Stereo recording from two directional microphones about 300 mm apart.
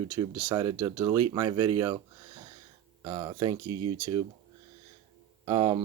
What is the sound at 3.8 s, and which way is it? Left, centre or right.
Speech, right.